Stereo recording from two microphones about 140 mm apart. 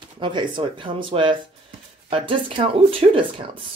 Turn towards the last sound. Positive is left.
turn(degrees=-40)  # may be behind; listen again after turning